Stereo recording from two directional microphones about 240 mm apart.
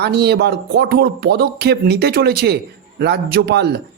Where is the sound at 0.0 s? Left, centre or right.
Right.